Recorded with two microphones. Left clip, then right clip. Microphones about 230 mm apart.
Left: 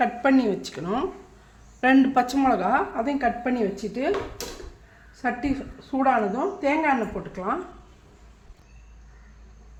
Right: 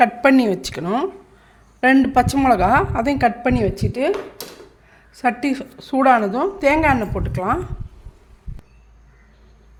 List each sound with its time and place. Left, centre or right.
0.0 s a woman's voice: right
5.1 s a woman's voice: right